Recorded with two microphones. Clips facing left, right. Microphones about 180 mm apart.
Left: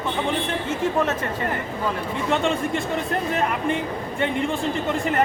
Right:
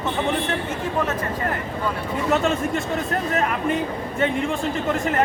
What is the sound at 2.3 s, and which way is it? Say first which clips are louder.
Speech: right 1 dB; centre (ahead or behind).